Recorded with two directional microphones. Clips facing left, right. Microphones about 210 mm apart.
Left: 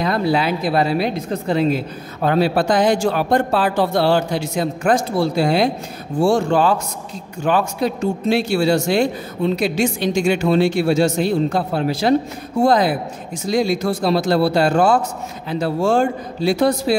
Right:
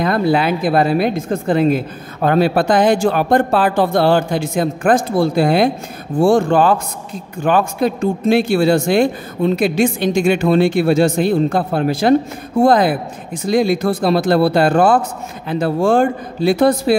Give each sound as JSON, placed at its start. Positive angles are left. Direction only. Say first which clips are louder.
{"t": 0.0, "sound": "a man's voice", "louder": "right 3 dB", "side_deg": -55}